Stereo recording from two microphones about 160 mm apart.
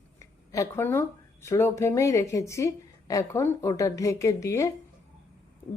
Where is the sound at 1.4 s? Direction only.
15° left (ahead or behind).